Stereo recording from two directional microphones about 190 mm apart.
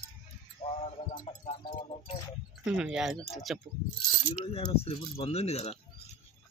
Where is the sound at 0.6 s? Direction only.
35° left (ahead or behind).